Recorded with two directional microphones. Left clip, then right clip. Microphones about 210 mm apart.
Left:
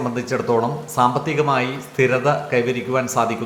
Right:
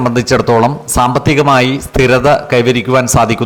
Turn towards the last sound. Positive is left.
turn(degrees=-50)  # may be behind; listen again after turning